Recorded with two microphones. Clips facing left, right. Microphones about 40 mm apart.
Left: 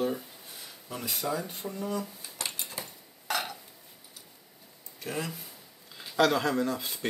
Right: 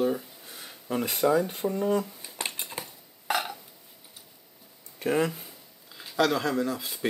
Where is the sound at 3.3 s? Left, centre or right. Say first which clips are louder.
Right 3 dB; centre.